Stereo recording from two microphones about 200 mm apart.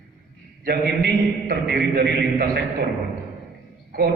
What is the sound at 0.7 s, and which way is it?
A man's voice, 55° right (ahead or behind).